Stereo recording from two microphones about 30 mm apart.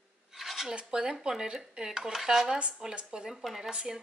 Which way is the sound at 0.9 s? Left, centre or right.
Right.